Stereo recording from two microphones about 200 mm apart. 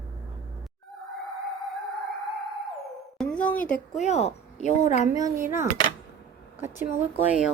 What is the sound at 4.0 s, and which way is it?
Speech, 35° left (ahead or behind).